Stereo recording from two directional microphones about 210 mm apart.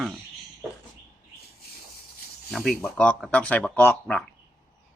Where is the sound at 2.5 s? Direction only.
Centre (ahead or behind).